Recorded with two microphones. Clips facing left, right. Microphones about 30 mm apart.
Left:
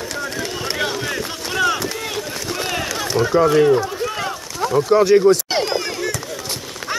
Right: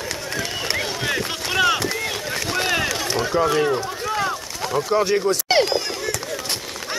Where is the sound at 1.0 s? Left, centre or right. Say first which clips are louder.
Right 1 dB; centre.